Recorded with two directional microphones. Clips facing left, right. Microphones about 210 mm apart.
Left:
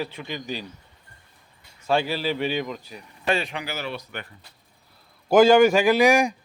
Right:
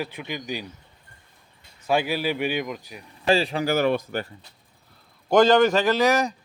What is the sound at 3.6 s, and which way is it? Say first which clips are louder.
Speech: right 11 dB; 50° right (ahead or behind).